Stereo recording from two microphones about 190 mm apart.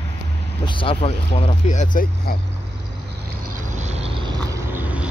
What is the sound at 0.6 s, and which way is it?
Speech, 25° left (ahead or behind).